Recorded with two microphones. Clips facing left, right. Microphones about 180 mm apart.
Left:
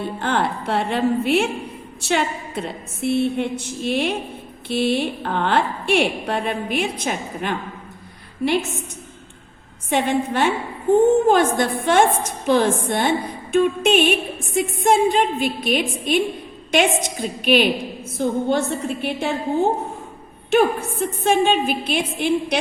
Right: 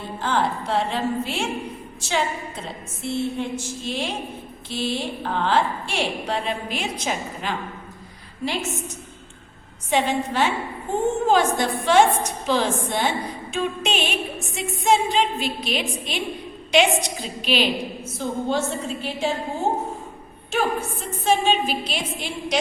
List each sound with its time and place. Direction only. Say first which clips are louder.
0.2 s a woman's voice: right 1 dB; 60° left (ahead or behind)
9.9 s a woman's voice: left 2 dB; 55° left (ahead or behind)
20.5 s a woman's voice: left 6 dB; 60° left (ahead or behind)